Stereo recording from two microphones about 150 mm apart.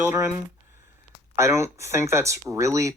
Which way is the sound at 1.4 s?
20° right (ahead or behind).